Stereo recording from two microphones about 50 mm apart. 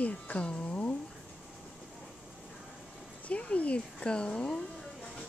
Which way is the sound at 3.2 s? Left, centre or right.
Left.